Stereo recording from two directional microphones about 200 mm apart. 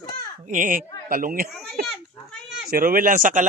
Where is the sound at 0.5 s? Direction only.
40° right (ahead or behind).